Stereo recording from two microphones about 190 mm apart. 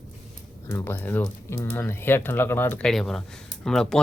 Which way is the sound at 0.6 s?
10° left (ahead or behind).